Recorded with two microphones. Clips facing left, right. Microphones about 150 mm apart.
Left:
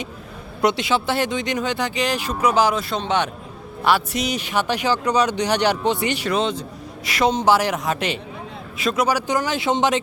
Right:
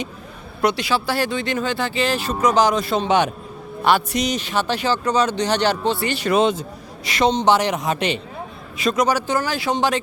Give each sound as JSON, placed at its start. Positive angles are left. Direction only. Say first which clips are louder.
{"t": 0.6, "sound": "a woman's voice", "louder": "even", "side_deg": 20}
{"t": 3.8, "sound": "speech", "louder": "right 2 dB", "side_deg": 5}
{"t": 6.3, "sound": "speech", "louder": "right 8 dB", "side_deg": -10}
{"t": 7.0, "sound": "a woman's voice", "louder": "right 1 dB", "side_deg": 5}